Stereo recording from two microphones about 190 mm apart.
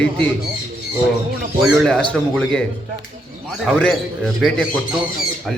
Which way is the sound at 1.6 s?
Centre (ahead or behind).